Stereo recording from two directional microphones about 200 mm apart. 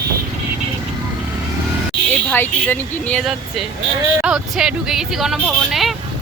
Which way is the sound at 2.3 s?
10° left (ahead or behind).